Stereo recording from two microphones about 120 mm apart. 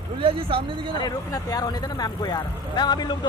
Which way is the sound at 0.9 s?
35° left (ahead or behind).